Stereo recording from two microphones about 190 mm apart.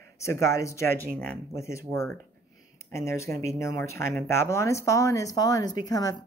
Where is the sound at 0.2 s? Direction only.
15° left (ahead or behind).